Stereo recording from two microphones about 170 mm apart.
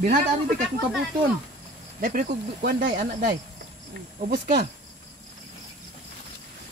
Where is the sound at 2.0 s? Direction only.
60° right (ahead or behind).